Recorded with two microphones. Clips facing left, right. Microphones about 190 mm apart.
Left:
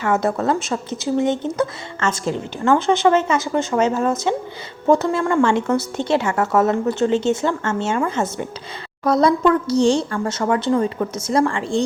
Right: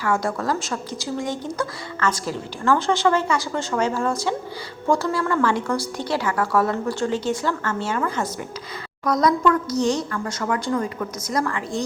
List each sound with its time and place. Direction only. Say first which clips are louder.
0.0 s a woman's voice: left 4 dB; 25° left (ahead or behind)